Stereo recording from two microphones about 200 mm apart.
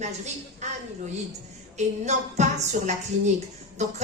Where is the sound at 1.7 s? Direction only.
35° right (ahead or behind).